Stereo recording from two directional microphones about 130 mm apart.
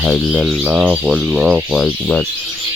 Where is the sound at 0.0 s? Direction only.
5° left (ahead or behind).